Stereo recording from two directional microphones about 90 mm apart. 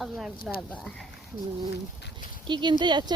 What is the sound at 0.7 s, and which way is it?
Speech, 10° left (ahead or behind).